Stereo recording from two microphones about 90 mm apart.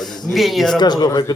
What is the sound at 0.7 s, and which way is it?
Speech, 50° left (ahead or behind).